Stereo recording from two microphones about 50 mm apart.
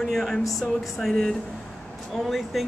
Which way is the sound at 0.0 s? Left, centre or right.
Centre.